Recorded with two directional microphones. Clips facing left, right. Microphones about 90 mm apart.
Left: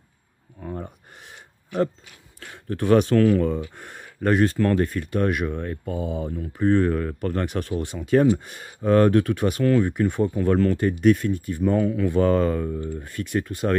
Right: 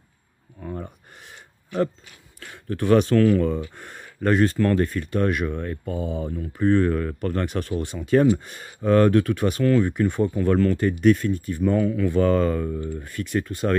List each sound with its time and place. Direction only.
0.6 s a sound: 20° left (ahead or behind)
2.4 s speech: 25° left (ahead or behind); by 12.8 s 10° left (ahead or behind)
12.8 s speech: 30° left (ahead or behind)